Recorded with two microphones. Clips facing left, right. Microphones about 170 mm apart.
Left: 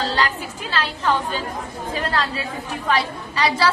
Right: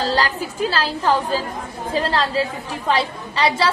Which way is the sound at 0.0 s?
40° right (ahead or behind).